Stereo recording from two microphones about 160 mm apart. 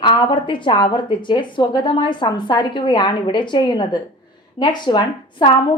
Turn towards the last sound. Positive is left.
turn(degrees=30)  # may be behind; listen again after turning